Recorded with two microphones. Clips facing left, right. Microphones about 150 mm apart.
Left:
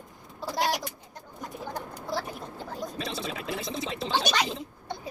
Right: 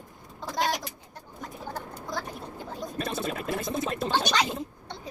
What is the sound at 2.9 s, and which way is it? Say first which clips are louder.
Gargling: right 7 dB; 55° right (ahead or behind).